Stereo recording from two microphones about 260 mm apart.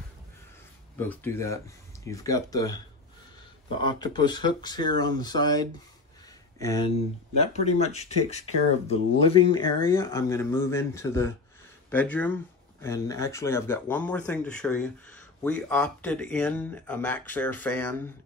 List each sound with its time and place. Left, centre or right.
0.9 s speech: centre
7.3 s speech: left; by 18.0 s centre